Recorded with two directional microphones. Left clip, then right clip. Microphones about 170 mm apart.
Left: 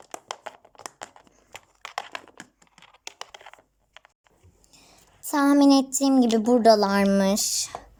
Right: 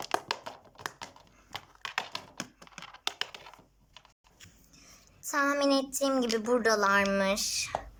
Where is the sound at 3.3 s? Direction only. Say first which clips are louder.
Left 3 dB; 50° left (ahead or behind).